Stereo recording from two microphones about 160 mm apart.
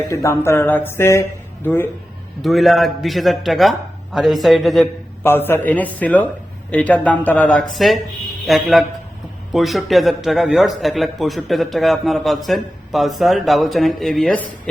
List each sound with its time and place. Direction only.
0.1 s speech: 20° left (ahead or behind)
2.4 s speech: centre (ahead or behind)
5.2 s speech: 15° left (ahead or behind)